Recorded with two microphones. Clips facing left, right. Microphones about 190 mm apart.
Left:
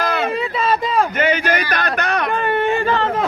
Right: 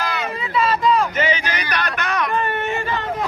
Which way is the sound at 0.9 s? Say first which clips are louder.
Left 3 dB; 50° left (ahead or behind).